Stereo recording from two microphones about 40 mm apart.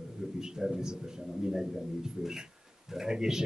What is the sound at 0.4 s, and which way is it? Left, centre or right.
A man's voice, centre.